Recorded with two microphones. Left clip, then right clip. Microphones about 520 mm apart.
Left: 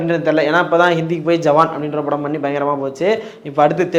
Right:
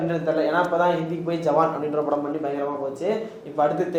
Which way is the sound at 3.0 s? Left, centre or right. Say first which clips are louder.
Left 9 dB; left.